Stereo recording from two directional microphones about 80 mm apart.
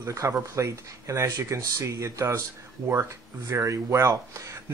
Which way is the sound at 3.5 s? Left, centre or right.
Right.